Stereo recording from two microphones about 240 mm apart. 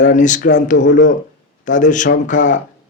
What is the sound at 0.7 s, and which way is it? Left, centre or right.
Speech, left.